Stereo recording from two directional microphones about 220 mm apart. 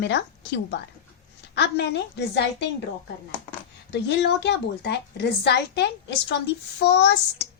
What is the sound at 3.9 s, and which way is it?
A woman's voice, 50° left (ahead or behind).